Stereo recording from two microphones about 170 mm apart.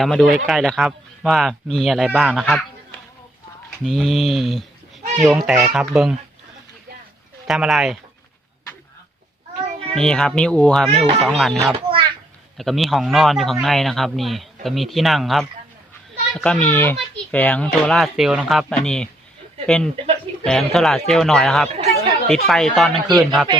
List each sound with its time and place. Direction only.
0.0 s speech: centre (ahead or behind)
7.4 s speech: centre (ahead or behind)
9.9 s speech: 5° left (ahead or behind)
11.9 s a sound: 30° right (ahead or behind)
12.5 s speech: centre (ahead or behind)
21.7 s chatter: 35° right (ahead or behind)
22.4 s speech: centre (ahead or behind)